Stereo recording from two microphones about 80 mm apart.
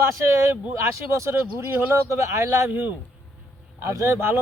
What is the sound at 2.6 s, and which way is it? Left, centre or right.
Speech, right.